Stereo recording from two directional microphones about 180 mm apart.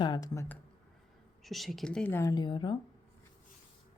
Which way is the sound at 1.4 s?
Centre (ahead or behind).